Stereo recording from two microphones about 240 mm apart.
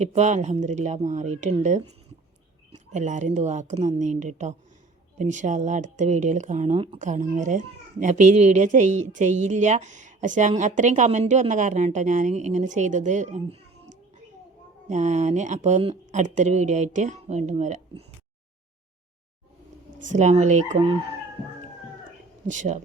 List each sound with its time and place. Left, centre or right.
0.0 s speech: right
2.9 s speech: right
14.8 s speech: right
20.1 s speech: right
22.4 s speech: right